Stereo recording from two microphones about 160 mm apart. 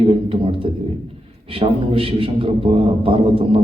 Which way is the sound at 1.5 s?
35° right (ahead or behind).